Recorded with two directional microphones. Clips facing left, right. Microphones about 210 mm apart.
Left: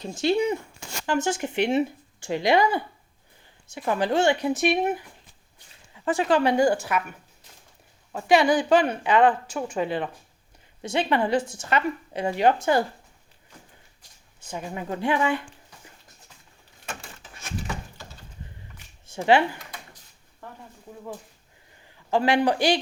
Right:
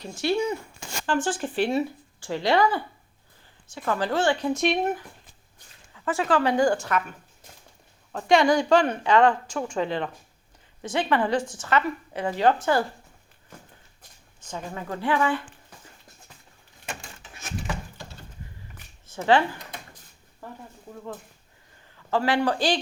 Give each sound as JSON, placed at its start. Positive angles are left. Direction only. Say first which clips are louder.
{"t": 0.0, "sound": "a woman's voice", "louder": "left 2 dB", "side_deg": 20}
{"t": 4.5, "sound": "a woman's voice", "louder": "left 1 dB", "side_deg": 5}
{"t": 8.1, "sound": "a woman's voice", "louder": "even", "side_deg": 5}
{"t": 10.9, "sound": "speech", "louder": "left 1 dB", "side_deg": 20}
{"t": 11.3, "sound": "a woman's voice", "louder": "left 1 dB", "side_deg": 10}
{"t": 11.6, "sound": "a woman's voice", "louder": "even", "side_deg": 20}
{"t": 14.4, "sound": "a woman's voice", "louder": "left 2 dB", "side_deg": 15}
{"t": 19.1, "sound": "a woman's voice", "louder": "left 1 dB", "side_deg": 15}
{"t": 20.4, "sound": "bird", "louder": "right 2 dB", "side_deg": -5}
{"t": 22.1, "sound": "a woman's voice", "louder": "left 2 dB", "side_deg": 15}